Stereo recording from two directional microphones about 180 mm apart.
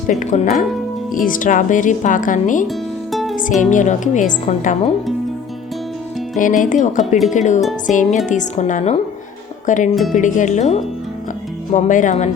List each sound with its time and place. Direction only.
0.1 s speech: 40° left (ahead or behind)
2.6 s music: centre (ahead or behind)
3.6 s speech: 45° left (ahead or behind)
6.4 s speech: 45° left (ahead or behind)
9.9 s speech: centre (ahead or behind)
10.2 s speech: 45° left (ahead or behind)